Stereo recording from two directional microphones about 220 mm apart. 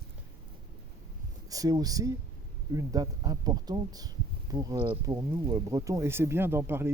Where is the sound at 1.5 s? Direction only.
15° right (ahead or behind).